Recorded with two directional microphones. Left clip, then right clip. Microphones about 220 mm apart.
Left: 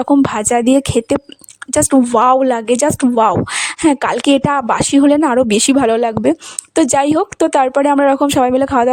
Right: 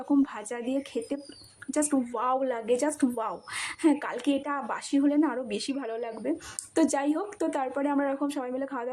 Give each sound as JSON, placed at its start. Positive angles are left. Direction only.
{"t": 0.0, "sound": "speech", "side_deg": 45}